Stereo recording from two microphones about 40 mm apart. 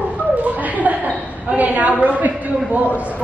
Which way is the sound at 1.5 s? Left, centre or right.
Right.